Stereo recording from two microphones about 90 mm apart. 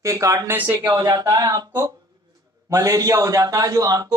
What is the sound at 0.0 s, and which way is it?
A man's voice, 35° right (ahead or behind).